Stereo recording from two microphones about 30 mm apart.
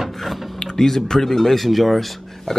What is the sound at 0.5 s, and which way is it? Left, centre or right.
Speech, centre.